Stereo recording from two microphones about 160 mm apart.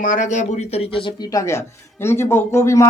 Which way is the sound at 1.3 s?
15° left (ahead or behind).